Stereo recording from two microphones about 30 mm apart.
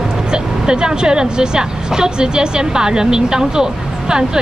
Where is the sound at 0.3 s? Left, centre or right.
Right.